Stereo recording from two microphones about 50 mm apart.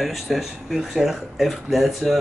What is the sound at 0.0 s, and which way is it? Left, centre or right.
Speech, centre.